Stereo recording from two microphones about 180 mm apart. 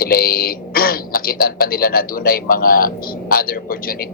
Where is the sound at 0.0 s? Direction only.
55° left (ahead or behind).